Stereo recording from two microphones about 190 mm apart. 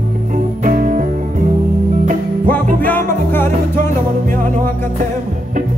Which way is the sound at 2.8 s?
10° left (ahead or behind).